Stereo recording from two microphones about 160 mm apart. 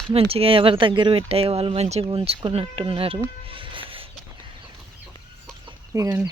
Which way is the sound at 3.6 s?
35° right (ahead or behind).